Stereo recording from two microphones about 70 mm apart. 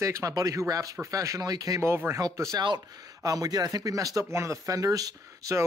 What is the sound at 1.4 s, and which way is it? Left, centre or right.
Speech, right.